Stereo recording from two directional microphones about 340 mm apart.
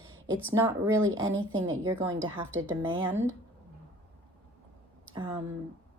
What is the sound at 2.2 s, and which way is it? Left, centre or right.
Speech, right.